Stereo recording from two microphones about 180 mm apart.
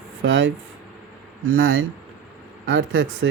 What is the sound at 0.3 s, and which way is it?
Speech, 85° right.